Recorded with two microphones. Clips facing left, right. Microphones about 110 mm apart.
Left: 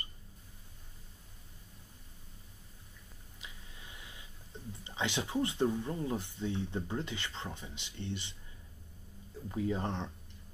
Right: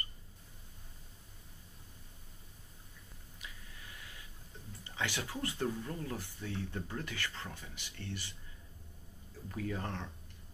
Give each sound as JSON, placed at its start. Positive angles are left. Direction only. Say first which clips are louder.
{"t": 3.3, "sound": "a sound", "louder": "even", "side_deg": 20}
{"t": 4.8, "sound": "speech", "louder": "left 3 dB", "side_deg": 20}
{"t": 9.5, "sound": "speech", "louder": "left 5 dB", "side_deg": 20}